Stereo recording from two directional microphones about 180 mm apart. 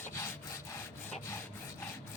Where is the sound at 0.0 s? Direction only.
15° left (ahead or behind).